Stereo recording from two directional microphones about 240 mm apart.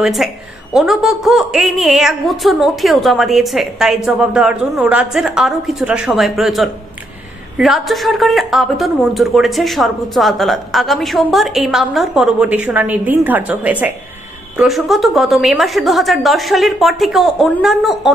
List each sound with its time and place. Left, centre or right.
0.0 s a woman's voice: centre